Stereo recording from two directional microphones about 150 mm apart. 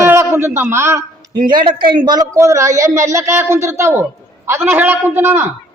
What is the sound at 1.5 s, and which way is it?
Speech, 70° right (ahead or behind).